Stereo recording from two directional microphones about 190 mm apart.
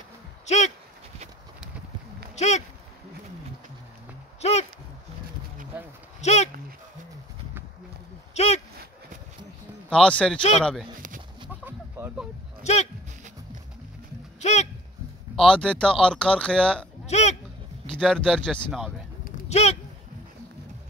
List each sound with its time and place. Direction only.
0.5 s speech: 35° left (ahead or behind)
2.3 s speech: 35° left (ahead or behind)
4.4 s a sound: 35° left (ahead or behind)
6.2 s dog: 35° left (ahead or behind)
8.4 s a sound: 35° left (ahead or behind)
9.8 s speech: 5° left (ahead or behind)
11.4 s a sound: 5° right (ahead or behind)
14.4 s a sound: 35° left (ahead or behind)
15.3 s speech: 5° left (ahead or behind)
17.0 s burping: 35° left (ahead or behind)
17.9 s speech: 5° left (ahead or behind)
19.5 s speech: 35° left (ahead or behind)